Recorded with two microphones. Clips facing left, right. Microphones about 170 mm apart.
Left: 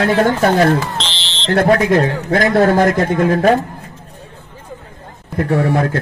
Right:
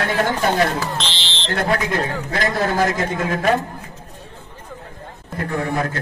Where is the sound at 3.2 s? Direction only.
35° left (ahead or behind).